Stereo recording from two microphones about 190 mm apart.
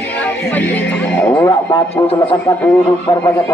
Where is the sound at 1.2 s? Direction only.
15° left (ahead or behind).